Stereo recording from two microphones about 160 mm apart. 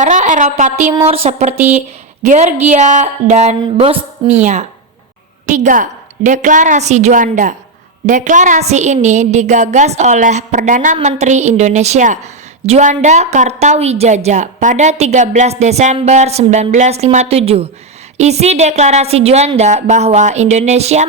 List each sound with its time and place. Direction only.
0.0 s a woman's voice: 50° right (ahead or behind)
1.5 s speech: 10° right (ahead or behind)
2.2 s a woman's voice: 45° right (ahead or behind)
4.2 s speech: 30° right (ahead or behind)
5.5 s a woman's voice: 55° right (ahead or behind)